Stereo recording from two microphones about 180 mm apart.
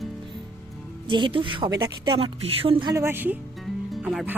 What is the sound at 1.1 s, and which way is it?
Speech, 25° right (ahead or behind).